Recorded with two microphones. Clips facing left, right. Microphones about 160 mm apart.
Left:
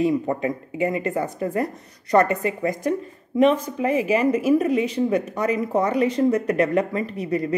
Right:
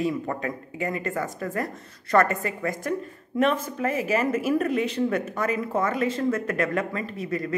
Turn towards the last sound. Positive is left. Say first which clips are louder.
# left 5 dB
turn(degrees=20)  # may be behind; listen again after turning